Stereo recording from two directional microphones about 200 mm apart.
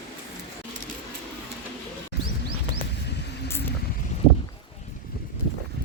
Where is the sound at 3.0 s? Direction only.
55° left (ahead or behind).